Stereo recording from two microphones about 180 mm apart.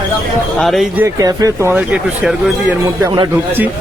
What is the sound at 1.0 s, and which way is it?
Speech, 15° right (ahead or behind).